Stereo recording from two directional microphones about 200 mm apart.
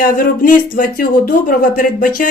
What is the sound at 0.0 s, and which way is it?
Speech, 45° left (ahead or behind).